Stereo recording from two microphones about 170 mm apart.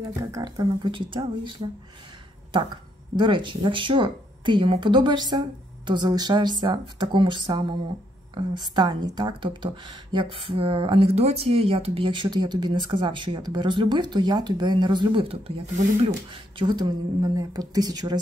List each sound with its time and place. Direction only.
0.3 s speech: 25° right (ahead or behind)